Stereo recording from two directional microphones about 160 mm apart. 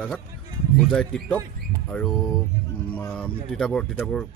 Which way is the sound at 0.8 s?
5° left (ahead or behind).